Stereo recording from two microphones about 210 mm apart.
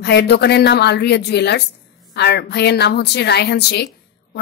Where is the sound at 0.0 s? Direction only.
50° left (ahead or behind).